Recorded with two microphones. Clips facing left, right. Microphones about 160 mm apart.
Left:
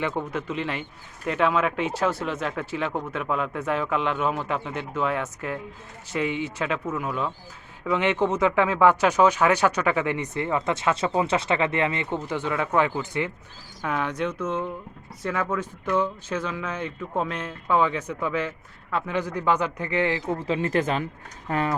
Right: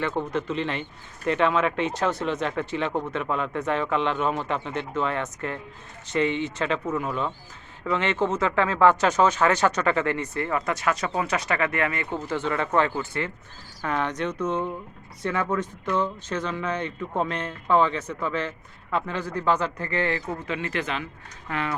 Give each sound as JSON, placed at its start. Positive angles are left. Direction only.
{"t": 0.0, "sound": "speech", "side_deg": 10}
{"t": 20.5, "sound": "speech", "side_deg": 40}